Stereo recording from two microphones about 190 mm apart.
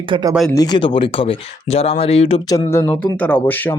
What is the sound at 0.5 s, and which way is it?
Speech, 20° left (ahead or behind).